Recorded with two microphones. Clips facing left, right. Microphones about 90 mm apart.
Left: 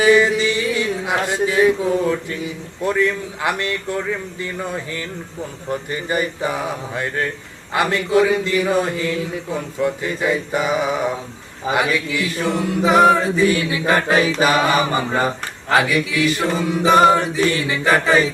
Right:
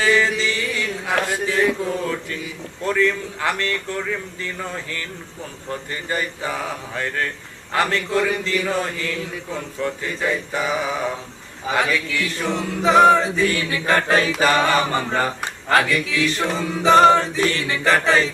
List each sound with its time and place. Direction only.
0.0 s speech: 15° left (ahead or behind)